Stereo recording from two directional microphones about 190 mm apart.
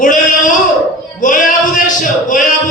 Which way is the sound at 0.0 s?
45° left (ahead or behind).